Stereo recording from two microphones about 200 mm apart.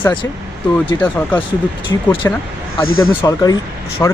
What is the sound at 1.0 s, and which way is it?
A man's voice, 10° left (ahead or behind).